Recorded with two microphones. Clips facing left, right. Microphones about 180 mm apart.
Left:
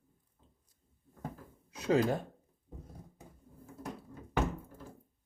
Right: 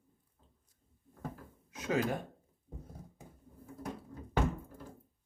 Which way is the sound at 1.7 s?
30° left (ahead or behind).